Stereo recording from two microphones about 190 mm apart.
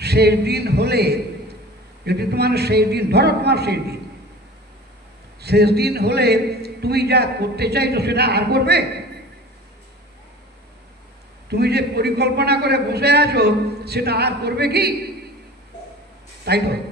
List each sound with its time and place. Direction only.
0.0 s a man's voice: 60° right (ahead or behind)
5.4 s a man's voice: 60° right (ahead or behind)
11.4 s a man's voice: 60° right (ahead or behind)
16.4 s a man's voice: 60° right (ahead or behind)